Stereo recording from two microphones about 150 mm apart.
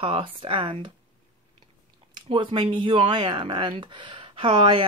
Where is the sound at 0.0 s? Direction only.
35° right (ahead or behind).